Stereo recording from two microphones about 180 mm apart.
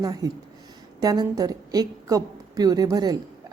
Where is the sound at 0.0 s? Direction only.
20° right (ahead or behind).